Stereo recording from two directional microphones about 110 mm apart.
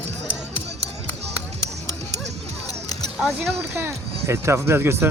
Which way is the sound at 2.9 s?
35° left (ahead or behind).